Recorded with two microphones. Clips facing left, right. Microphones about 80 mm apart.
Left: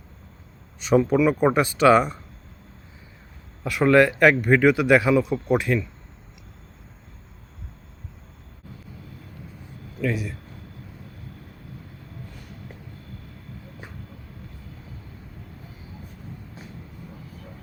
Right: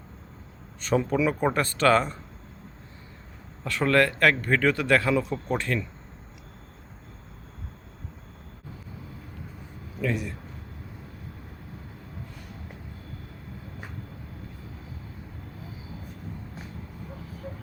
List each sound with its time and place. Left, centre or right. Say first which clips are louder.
0.8 s speech: left 5 dB; centre
3.6 s speech: left 5 dB; centre
10.0 s speech: left 2 dB; centre